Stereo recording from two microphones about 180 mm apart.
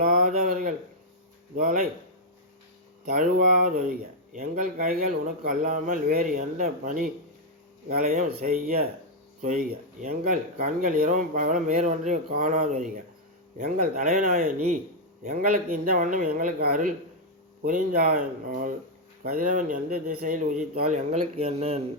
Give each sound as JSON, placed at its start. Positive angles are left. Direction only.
{"t": 0.0, "sound": "speech", "side_deg": -50}
{"t": 3.2, "sound": "speech", "side_deg": -50}